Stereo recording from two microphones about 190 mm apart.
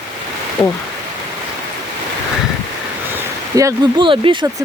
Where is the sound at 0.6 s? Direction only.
Centre (ahead or behind).